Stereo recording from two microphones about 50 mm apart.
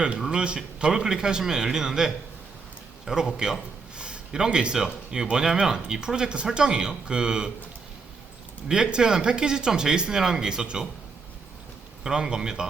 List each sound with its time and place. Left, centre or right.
0.2 s speech: centre
3.3 s speech: centre
3.9 s speech: centre
8.6 s speech: centre
12.0 s speech: centre